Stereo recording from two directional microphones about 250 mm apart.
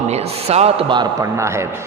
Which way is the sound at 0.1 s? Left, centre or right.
Right.